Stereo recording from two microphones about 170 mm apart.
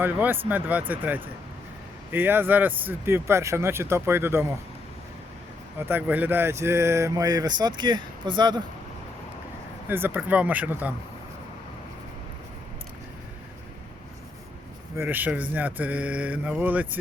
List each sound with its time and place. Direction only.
0.0 s speech: 10° right (ahead or behind)
5.9 s speech: 10° right (ahead or behind); by 8.6 s 25° right (ahead or behind)
9.9 s speech: 10° right (ahead or behind)
14.9 s speech: 10° right (ahead or behind)